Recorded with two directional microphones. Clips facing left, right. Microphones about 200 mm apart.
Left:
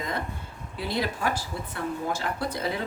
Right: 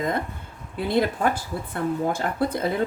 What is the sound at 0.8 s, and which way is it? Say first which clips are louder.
Speech: right 7 dB; 55° right (ahead or behind).